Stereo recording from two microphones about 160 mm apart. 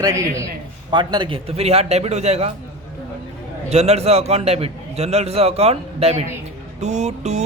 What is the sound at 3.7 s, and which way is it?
A man's voice, 40° right (ahead or behind).